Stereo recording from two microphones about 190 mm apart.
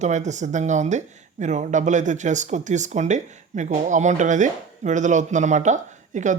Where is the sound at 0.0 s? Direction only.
40° right (ahead or behind).